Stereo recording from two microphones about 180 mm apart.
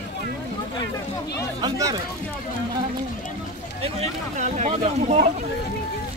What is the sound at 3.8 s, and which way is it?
Speech, 35° right (ahead or behind).